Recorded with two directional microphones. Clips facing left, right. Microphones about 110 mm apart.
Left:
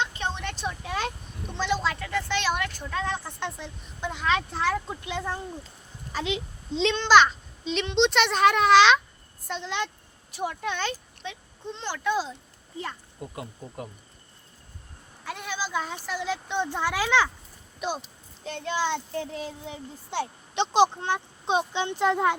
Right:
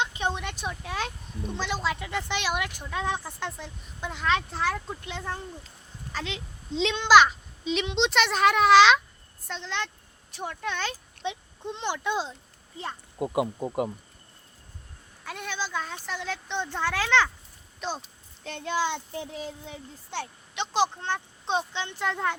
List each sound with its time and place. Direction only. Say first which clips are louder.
0.0 s vehicle: right 1 dB; 15° right (ahead or behind)
1.5 s speech: left 3 dB; 5° right (ahead or behind)
3.4 s a child's voice: left 1 dB; centre (ahead or behind)
6.1 s speech: left 5 dB; 15° left (ahead or behind)
6.7 s a child's voice: even; 5° right (ahead or behind)
11.2 s a child's voice: right 5 dB; 20° right (ahead or behind)
13.2 s speech: right 10 dB; 90° right
15.2 s speech: left 1 dB; centre (ahead or behind)
18.4 s a child's voice: even; centre (ahead or behind)
20.6 s speech: left 5 dB; 20° left (ahead or behind)